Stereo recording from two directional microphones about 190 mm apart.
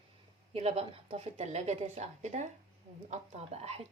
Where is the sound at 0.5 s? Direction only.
30° right (ahead or behind).